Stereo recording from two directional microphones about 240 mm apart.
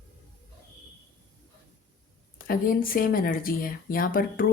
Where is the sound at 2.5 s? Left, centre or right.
Left.